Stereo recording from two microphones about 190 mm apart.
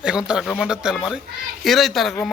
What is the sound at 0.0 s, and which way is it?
A man's voice, 5° right (ahead or behind).